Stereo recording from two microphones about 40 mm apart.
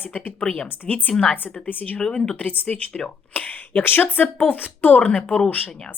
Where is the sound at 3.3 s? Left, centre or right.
Left.